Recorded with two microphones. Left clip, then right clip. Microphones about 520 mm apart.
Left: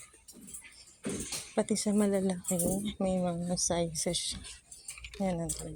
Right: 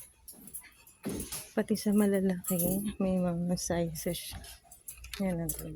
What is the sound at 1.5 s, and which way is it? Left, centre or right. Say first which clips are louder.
Speech: even; right.